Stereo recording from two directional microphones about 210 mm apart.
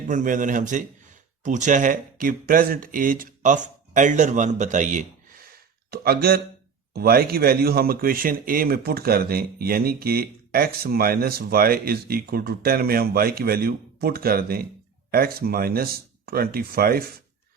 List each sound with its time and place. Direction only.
0.1 s a man's voice: 40° right (ahead or behind)